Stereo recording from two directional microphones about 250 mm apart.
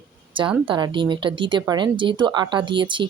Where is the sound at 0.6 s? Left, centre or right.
Centre.